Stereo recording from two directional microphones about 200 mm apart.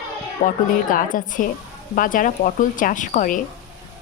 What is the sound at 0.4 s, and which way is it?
Speech, 40° left (ahead or behind).